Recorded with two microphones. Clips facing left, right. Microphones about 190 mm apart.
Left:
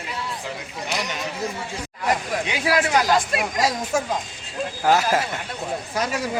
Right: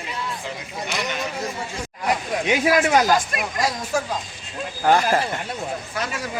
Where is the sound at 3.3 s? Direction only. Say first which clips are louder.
Left 3 dB; 30° left (ahead or behind).